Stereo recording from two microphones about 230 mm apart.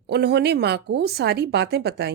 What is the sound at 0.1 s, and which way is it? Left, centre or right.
A woman's voice, right.